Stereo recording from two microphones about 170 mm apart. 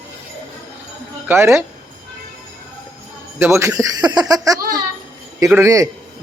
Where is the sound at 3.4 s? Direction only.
15° right (ahead or behind).